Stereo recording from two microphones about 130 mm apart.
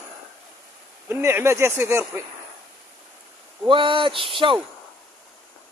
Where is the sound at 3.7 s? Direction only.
40° right (ahead or behind).